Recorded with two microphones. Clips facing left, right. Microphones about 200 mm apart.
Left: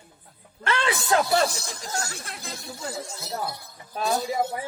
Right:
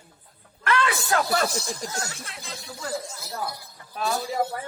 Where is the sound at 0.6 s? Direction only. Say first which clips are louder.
Even; 25° left (ahead or behind).